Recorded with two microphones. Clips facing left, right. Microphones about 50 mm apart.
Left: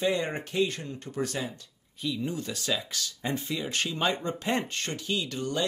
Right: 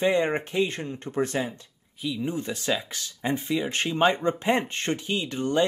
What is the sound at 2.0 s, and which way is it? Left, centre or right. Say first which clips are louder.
Speech: right 2 dB; centre.